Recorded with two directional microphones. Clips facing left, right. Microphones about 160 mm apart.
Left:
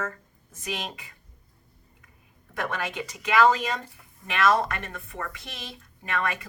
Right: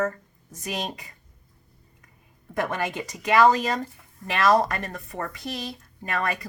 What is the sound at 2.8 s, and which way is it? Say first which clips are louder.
Speech: right 4 dB; 40° right (ahead or behind).